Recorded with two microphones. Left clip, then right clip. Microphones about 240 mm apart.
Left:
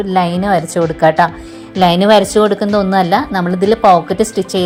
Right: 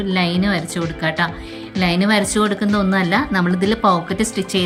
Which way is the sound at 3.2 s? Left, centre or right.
Centre.